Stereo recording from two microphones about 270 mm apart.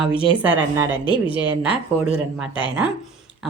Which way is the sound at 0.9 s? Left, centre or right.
Centre.